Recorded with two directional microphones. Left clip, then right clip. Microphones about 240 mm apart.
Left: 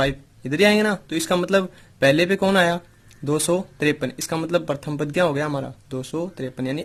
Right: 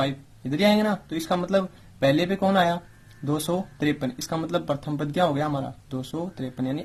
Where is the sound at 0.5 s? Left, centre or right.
Left.